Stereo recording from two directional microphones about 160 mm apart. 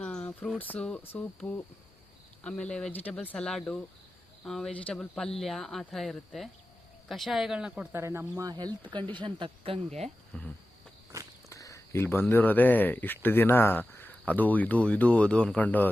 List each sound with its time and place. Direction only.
0.0 s speech: 5° left (ahead or behind)
8.0 s speech: 15° right (ahead or behind); by 10.1 s 40° right (ahead or behind)
10.3 s speech: 5° left (ahead or behind)
11.4 s a sound: 20° left (ahead or behind)
12.3 s speech: 10° left (ahead or behind)